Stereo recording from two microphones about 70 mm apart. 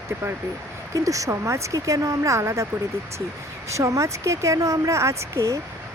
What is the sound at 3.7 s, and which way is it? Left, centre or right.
Speech, right.